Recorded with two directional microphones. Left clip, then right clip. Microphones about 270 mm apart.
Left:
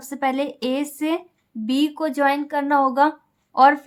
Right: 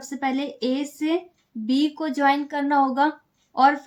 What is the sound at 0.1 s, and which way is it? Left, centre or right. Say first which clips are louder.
Speech: left 4 dB; left.